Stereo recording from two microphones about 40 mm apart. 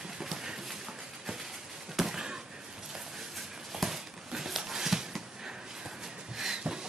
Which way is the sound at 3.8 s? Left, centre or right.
Centre.